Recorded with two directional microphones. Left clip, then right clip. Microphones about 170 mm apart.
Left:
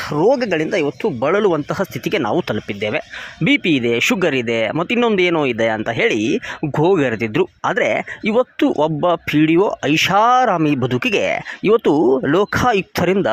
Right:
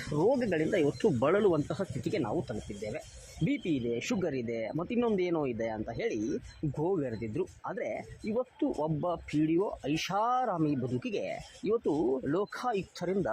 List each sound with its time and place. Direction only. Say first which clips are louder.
0.2 s speech: left 13 dB; 40° left (ahead or behind)
2.3 s speech: left 16 dB; 50° left (ahead or behind)